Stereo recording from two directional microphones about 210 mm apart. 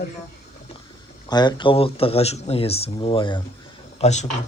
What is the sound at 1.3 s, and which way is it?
Speech, 20° left (ahead or behind).